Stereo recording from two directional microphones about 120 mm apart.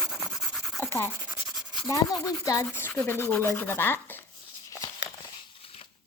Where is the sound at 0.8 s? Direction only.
20° left (ahead or behind).